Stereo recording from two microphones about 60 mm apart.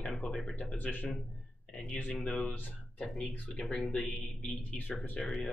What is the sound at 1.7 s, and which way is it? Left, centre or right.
Speech, centre.